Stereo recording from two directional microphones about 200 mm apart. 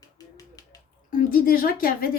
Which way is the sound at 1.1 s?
45° left (ahead or behind).